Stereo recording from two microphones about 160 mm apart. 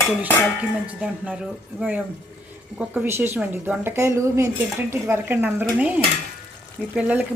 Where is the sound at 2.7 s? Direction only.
10° right (ahead or behind).